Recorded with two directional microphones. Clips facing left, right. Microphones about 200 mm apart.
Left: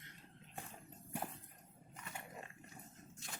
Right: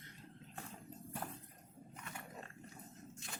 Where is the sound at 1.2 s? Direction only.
15° left (ahead or behind).